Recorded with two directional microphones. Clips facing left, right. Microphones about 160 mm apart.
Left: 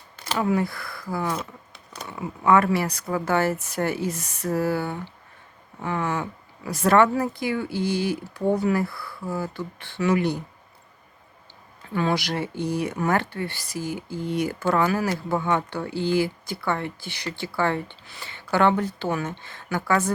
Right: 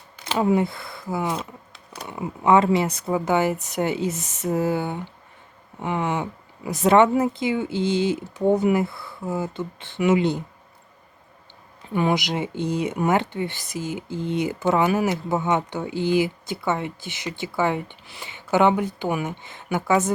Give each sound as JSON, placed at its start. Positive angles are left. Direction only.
{"t": 0.3, "sound": "speech", "side_deg": -25}
{"t": 11.9, "sound": "speech", "side_deg": -20}